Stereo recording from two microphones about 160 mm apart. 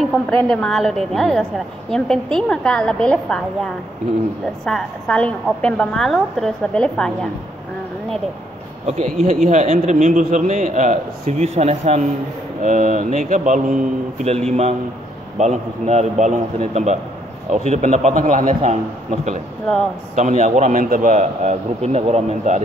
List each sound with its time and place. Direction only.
0.1 s a woman's voice: 10° left (ahead or behind)
8.8 s speech: 40° right (ahead or behind)
20.2 s speech: 45° right (ahead or behind)